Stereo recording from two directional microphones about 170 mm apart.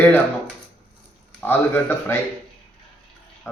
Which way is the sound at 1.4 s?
10° left (ahead or behind).